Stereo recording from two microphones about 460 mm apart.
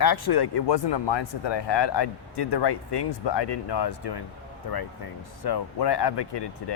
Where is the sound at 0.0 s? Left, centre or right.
Left.